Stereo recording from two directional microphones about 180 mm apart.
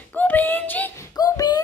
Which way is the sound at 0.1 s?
10° left (ahead or behind).